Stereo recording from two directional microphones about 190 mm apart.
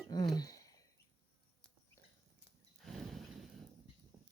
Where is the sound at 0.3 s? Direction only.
20° left (ahead or behind).